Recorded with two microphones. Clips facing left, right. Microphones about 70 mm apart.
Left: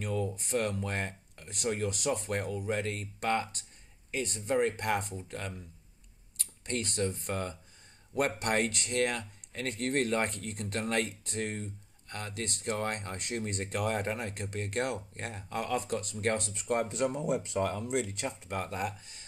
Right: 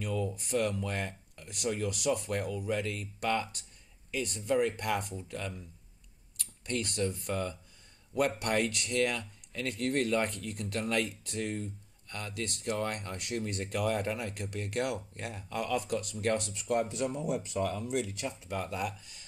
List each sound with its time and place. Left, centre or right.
0.0 s speech: left